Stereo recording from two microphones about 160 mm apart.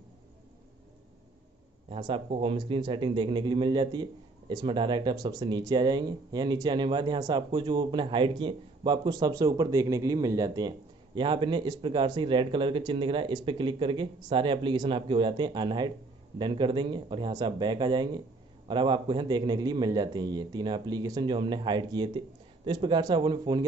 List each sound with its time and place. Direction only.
1.9 s a man's voice: 30° right (ahead or behind)